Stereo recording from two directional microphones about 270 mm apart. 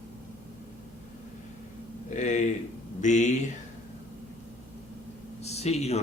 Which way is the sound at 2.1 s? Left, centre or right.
Left.